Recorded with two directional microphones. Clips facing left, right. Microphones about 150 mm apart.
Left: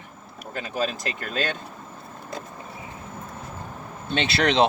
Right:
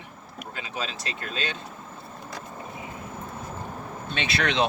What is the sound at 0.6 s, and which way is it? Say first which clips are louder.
Speech: left 7 dB; 50° left (ahead or behind).